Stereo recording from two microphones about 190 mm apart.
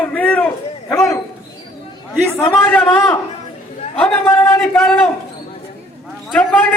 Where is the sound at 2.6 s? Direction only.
5° left (ahead or behind).